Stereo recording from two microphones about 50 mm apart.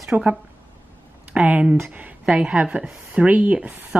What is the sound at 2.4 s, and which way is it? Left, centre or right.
Speech, right.